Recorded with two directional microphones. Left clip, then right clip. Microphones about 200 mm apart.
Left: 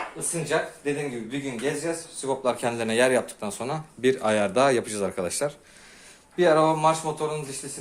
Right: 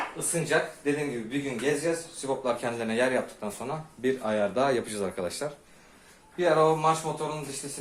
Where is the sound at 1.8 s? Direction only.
45° left (ahead or behind).